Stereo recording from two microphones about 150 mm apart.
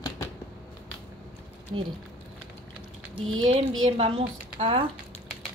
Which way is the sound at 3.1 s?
40° right (ahead or behind).